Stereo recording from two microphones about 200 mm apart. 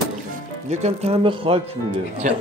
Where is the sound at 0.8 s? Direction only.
30° right (ahead or behind).